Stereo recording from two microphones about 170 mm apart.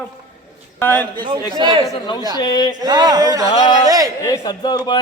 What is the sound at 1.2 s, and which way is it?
Speech, 25° right (ahead or behind).